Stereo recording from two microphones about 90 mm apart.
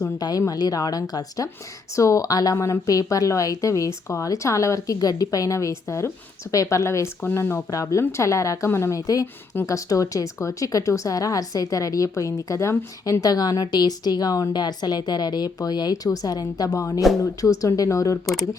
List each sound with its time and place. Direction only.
0.0 s a woman's voice: 45° left (ahead or behind)